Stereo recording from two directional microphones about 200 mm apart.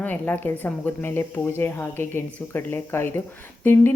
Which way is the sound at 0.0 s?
10° left (ahead or behind).